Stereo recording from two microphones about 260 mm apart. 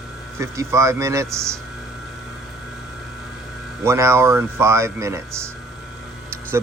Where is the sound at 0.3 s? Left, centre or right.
Centre.